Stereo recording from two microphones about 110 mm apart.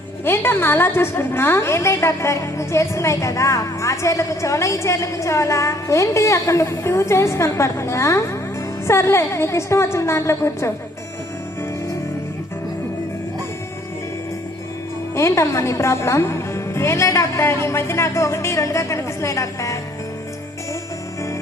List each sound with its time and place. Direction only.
0.3 s a woman's voice: 20° left (ahead or behind)
15.1 s a woman's voice: 25° left (ahead or behind)